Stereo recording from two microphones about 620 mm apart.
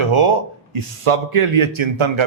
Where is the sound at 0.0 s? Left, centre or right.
Right.